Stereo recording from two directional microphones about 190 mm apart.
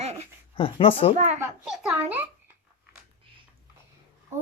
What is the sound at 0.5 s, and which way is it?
Speech, 30° left (ahead or behind).